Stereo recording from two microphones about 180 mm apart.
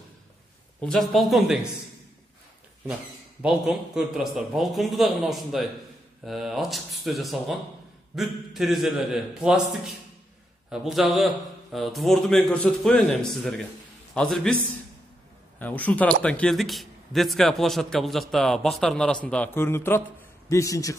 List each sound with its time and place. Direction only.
0.7 s a man's voice: 5° left (ahead or behind)
3.4 s a man's voice: 5° right (ahead or behind)
15.6 s a man's voice: 10° left (ahead or behind)